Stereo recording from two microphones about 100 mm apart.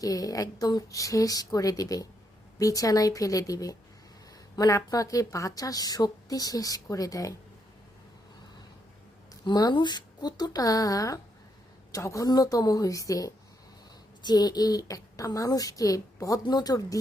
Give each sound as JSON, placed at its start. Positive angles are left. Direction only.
{"t": 0.0, "sound": "a woman's voice", "side_deg": 35}
{"t": 9.4, "sound": "a woman's voice", "side_deg": 45}